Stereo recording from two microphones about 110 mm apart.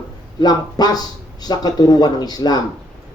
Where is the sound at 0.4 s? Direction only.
40° left (ahead or behind).